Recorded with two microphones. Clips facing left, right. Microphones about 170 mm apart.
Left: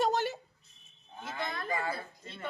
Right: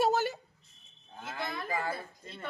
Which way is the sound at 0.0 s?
5° right (ahead or behind).